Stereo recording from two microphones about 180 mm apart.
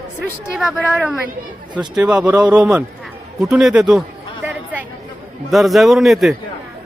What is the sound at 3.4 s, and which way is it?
Speech, 5° right (ahead or behind).